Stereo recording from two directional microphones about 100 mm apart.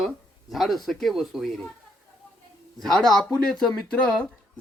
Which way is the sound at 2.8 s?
5° left (ahead or behind).